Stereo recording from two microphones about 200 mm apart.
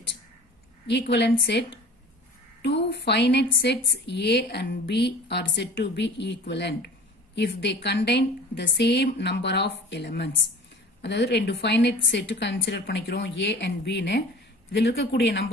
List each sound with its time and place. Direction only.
0.8 s a woman's voice: 60° left (ahead or behind)